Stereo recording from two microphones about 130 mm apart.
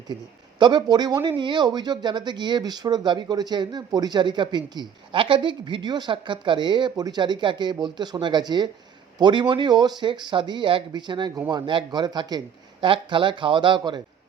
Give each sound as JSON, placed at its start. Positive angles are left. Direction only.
{"t": 0.1, "sound": "speech", "side_deg": -35}